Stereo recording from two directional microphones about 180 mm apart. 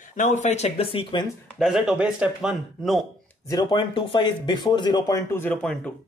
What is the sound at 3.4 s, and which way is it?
Speech, 25° left (ahead or behind).